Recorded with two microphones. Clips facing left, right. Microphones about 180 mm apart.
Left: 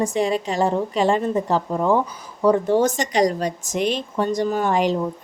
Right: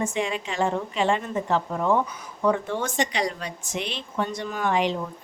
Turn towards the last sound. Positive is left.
turn(degrees=40)  # may be behind; listen again after turning